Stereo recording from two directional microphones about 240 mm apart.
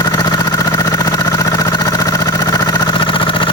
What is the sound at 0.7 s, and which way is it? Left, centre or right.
Vehicle, centre.